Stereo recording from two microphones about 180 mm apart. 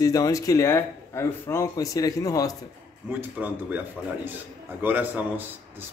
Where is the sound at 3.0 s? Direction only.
10° right (ahead or behind).